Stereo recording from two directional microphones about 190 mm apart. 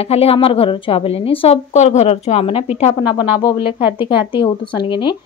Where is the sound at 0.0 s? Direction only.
30° left (ahead or behind).